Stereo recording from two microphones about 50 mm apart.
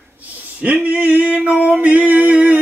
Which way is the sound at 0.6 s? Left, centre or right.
Right.